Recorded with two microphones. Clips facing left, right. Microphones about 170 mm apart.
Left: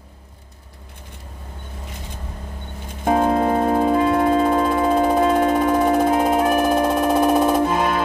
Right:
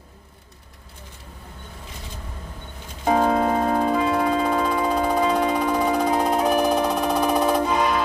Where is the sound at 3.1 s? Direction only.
50° left (ahead or behind).